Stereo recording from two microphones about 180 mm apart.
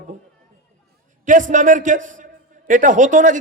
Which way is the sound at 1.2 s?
45° right (ahead or behind).